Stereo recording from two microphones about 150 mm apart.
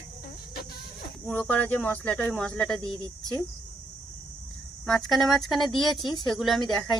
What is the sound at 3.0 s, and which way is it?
Speech, 25° right (ahead or behind).